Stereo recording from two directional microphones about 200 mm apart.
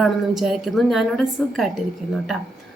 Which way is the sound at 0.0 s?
Centre (ahead or behind).